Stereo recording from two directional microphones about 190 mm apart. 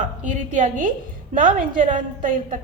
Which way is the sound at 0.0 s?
40° right (ahead or behind).